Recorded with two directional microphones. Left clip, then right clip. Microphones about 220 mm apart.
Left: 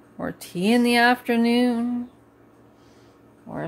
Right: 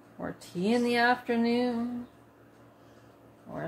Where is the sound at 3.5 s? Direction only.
50° left (ahead or behind).